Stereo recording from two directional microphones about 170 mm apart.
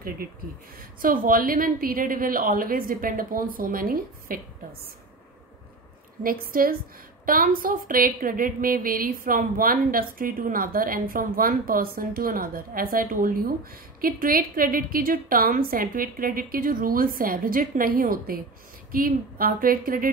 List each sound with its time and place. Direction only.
0.7 s a woman's voice: 55° right (ahead or behind)
6.2 s a woman's voice: 55° right (ahead or behind)